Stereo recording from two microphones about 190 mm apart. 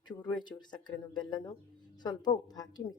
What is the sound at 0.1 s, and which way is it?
Speech, 20° left (ahead or behind).